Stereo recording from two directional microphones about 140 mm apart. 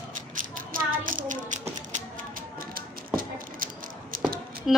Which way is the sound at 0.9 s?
75° right (ahead or behind).